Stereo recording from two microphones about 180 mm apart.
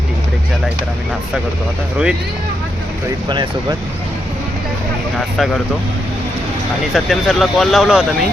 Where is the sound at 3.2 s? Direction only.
25° right (ahead or behind).